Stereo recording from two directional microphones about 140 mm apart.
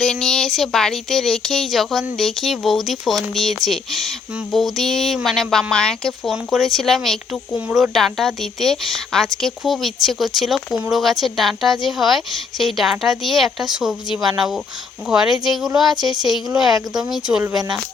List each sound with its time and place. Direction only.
0.0 s speech: 5° left (ahead or behind)
16.0 s speech: 30° right (ahead or behind)
17.3 s speech: 5° right (ahead or behind)